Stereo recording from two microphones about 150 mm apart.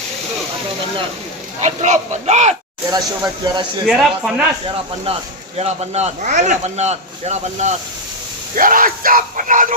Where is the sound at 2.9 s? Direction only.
25° right (ahead or behind).